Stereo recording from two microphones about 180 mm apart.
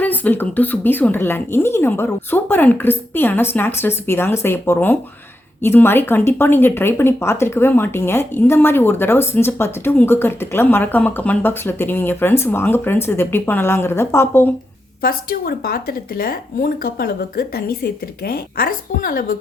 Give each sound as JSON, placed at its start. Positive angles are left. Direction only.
{"t": 0.0, "sound": "speech", "side_deg": 10}
{"t": 15.0, "sound": "a woman's voice", "side_deg": 55}